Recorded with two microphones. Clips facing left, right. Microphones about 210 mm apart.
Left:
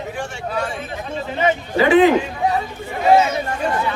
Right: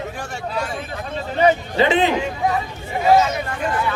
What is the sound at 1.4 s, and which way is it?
Speech, 35° right (ahead or behind).